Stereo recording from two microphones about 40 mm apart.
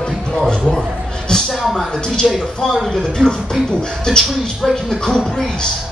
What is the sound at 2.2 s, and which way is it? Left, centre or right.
Speech, centre.